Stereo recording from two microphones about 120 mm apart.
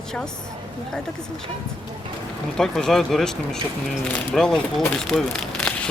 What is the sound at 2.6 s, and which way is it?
Speech, 5° left (ahead or behind).